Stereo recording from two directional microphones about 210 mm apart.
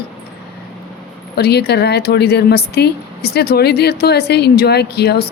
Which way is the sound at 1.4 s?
50° left (ahead or behind).